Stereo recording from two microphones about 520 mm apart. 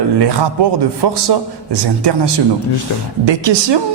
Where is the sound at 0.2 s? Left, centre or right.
Right.